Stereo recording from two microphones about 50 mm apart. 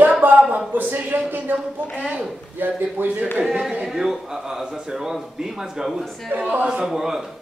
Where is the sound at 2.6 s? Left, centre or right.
Right.